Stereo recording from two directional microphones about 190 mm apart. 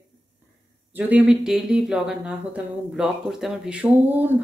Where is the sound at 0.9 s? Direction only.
5° right (ahead or behind).